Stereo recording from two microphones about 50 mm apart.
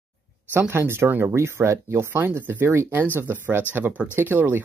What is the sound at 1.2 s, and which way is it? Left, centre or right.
Speech, right.